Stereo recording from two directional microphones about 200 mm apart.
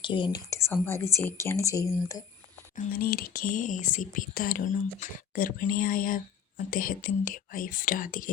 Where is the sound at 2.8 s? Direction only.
50° left (ahead or behind).